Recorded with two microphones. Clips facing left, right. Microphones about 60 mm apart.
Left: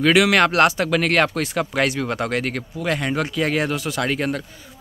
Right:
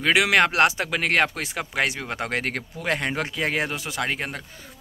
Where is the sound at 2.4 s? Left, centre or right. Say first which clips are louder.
Left 3 dB; right.